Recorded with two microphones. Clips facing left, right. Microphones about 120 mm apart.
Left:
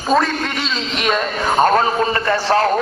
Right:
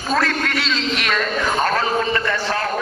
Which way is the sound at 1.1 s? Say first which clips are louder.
Left 5 dB; 25° left (ahead or behind).